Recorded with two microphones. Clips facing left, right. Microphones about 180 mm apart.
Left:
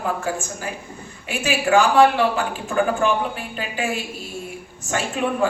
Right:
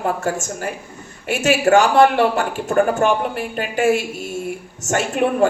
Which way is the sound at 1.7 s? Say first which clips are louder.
Right 3 dB; 45° right (ahead or behind).